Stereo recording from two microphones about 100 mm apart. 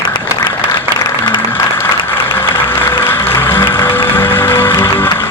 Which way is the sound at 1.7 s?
20° left (ahead or behind).